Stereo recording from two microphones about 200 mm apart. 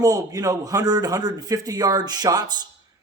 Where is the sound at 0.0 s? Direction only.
15° right (ahead or behind).